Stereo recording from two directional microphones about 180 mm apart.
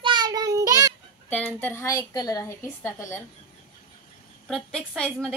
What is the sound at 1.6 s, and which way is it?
A woman's voice, 15° left (ahead or behind).